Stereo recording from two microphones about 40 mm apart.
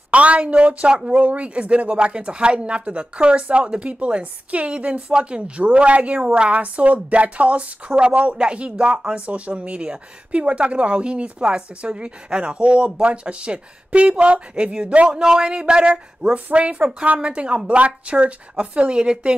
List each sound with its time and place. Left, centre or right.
0.1 s a woman's voice: right